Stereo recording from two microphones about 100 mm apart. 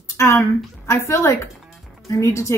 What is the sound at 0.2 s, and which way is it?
Speech, 25° left (ahead or behind).